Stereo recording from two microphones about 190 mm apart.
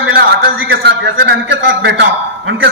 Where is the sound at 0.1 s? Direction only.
50° right (ahead or behind).